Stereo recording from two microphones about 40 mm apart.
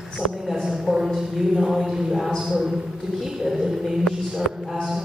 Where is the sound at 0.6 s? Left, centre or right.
Centre.